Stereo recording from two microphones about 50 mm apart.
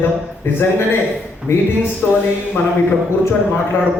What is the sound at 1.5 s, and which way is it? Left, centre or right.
Speech, left.